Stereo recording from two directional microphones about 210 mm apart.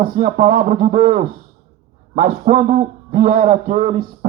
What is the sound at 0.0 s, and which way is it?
A man's voice, 40° right (ahead or behind).